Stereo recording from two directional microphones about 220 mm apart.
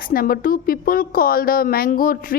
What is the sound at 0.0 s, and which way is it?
A woman's voice, 40° left (ahead or behind).